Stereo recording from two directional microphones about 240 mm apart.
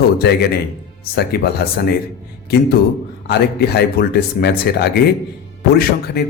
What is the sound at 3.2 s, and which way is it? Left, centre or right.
A man's voice, left.